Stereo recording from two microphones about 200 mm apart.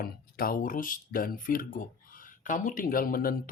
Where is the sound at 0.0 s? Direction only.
45° left (ahead or behind).